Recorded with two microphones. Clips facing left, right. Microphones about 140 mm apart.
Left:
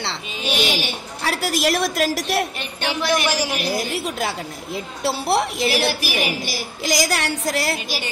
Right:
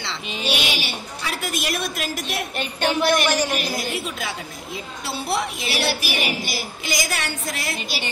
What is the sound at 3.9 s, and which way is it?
A woman's voice, 65° left (ahead or behind).